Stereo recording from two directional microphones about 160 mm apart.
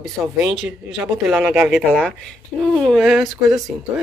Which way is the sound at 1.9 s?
Centre (ahead or behind).